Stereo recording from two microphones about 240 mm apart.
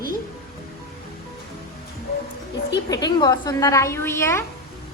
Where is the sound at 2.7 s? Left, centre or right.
Centre.